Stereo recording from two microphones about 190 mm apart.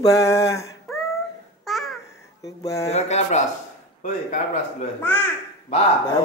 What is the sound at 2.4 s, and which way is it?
Speech, 15° left (ahead or behind).